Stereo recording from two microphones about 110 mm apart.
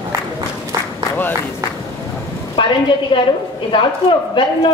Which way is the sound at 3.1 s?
55° left (ahead or behind).